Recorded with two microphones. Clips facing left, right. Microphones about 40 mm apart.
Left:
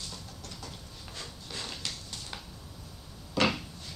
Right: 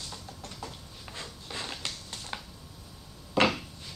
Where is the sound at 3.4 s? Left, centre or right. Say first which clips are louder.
Right 3 dB; right.